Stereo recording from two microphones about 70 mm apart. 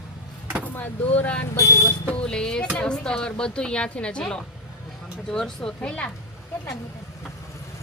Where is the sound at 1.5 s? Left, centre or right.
Left.